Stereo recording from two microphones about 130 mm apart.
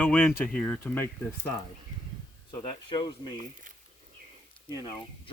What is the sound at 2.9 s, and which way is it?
Speech, 35° left (ahead or behind).